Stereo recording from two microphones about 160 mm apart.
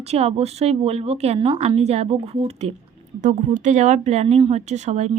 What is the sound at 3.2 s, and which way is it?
Speech, 50° right (ahead or behind).